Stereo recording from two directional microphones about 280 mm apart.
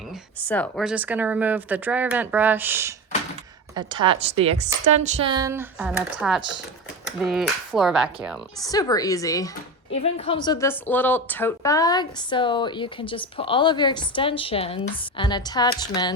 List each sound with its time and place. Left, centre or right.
0.4 s a woman's voice: centre
8.6 s a woman's voice: centre